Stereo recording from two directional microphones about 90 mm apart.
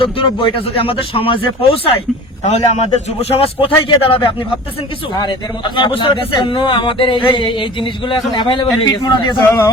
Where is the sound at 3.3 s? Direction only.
90° left.